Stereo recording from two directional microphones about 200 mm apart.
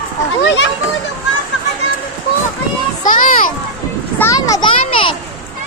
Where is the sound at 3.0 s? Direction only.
40° left (ahead or behind).